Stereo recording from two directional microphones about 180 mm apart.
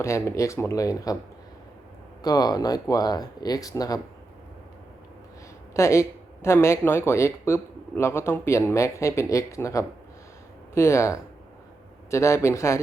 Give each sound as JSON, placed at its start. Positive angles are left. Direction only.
{"t": 0.0, "sound": "speech", "side_deg": 15}
{"t": 2.2, "sound": "speech", "side_deg": 20}
{"t": 5.7, "sound": "speech", "side_deg": 15}